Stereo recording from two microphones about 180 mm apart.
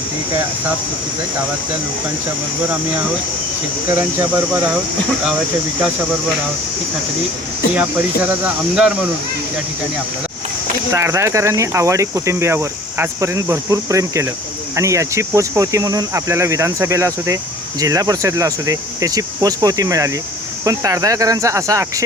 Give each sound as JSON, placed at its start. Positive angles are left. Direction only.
{"t": 3.8, "sound": "speech", "side_deg": -10}
{"t": 7.8, "sound": "speech", "side_deg": -10}
{"t": 10.9, "sound": "speech", "side_deg": -15}